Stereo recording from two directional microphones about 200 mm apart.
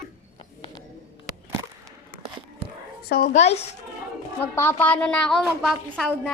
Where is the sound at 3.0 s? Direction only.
50° left (ahead or behind).